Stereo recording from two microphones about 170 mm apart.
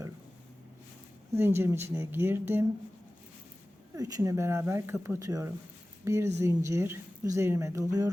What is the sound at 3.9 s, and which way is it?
Speech, 20° right (ahead or behind).